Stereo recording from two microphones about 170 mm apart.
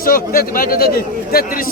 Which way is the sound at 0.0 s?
55° left (ahead or behind).